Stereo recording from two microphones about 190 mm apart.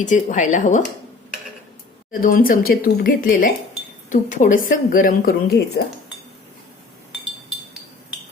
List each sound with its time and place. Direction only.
0.0 s speech: 40° left (ahead or behind)
2.2 s speech: 45° left (ahead or behind)